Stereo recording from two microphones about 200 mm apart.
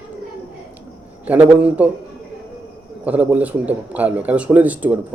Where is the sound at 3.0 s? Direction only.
5° right (ahead or behind).